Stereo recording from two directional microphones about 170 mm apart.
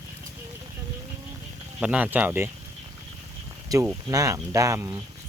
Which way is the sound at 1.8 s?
10° right (ahead or behind).